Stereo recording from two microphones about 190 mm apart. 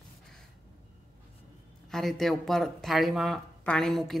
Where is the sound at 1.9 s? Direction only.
Centre (ahead or behind).